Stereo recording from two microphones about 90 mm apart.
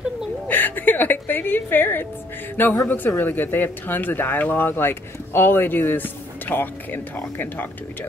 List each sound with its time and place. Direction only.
0.5 s music: 20° left (ahead or behind)
2.5 s speech: 20° left (ahead or behind)